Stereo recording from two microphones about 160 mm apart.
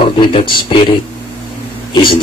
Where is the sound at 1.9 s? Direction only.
30° left (ahead or behind).